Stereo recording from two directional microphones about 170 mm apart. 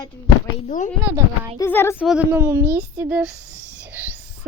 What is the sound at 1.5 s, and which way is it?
Speech, 15° left (ahead or behind).